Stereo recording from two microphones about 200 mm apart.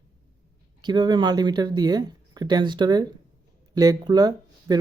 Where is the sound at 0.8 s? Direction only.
20° right (ahead or behind).